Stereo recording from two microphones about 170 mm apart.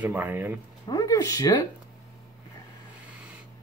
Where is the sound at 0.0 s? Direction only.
10° right (ahead or behind).